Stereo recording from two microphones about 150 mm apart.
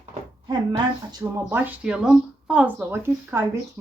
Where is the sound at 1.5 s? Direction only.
10° right (ahead or behind).